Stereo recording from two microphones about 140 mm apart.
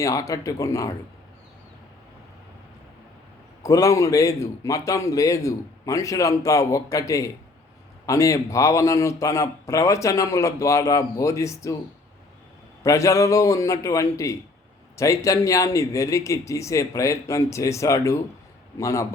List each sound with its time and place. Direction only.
0.0 s speech: 25° left (ahead or behind)
3.6 s speech: 20° left (ahead or behind)
12.8 s speech: 25° left (ahead or behind)